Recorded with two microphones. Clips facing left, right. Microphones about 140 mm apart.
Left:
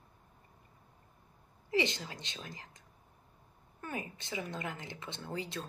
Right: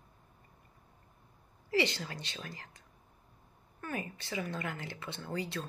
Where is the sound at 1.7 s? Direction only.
20° left (ahead or behind).